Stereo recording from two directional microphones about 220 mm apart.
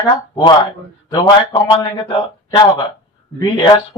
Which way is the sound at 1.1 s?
20° left (ahead or behind).